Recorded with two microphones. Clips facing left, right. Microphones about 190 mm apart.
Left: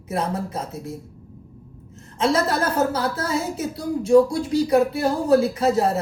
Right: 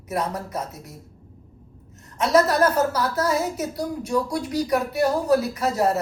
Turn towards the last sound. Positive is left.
turn(degrees=25)  # may be behind; listen again after turning